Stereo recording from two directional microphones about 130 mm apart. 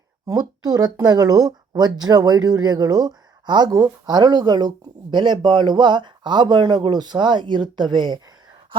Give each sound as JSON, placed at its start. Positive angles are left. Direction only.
{"t": 0.3, "sound": "speech", "side_deg": -30}